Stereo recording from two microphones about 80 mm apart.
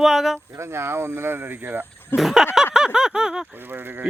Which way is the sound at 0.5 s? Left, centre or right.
Right.